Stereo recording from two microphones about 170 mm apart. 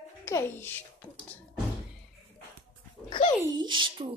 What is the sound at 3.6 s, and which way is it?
Speech, 30° right (ahead or behind).